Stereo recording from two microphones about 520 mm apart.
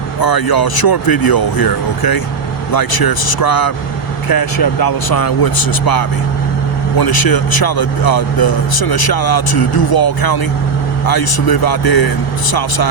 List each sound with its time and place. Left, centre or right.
0.2 s speech: left